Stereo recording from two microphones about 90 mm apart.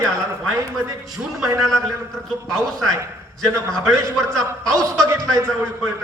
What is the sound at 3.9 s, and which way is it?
Speech, 40° right (ahead or behind).